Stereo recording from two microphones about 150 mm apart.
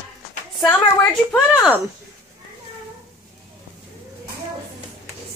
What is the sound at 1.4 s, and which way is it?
Speech, 10° right (ahead or behind).